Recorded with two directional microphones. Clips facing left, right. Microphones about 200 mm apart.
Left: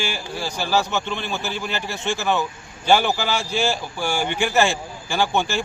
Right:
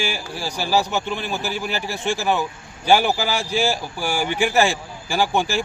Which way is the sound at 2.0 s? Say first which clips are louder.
Right 2 dB; 35° right (ahead or behind).